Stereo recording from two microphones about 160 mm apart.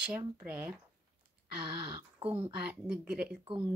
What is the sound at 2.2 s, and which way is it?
Speech, 35° right (ahead or behind).